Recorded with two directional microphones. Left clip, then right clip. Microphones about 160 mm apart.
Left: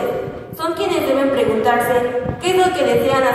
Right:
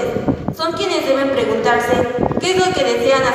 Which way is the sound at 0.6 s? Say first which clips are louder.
Left 2 dB; 30° right (ahead or behind).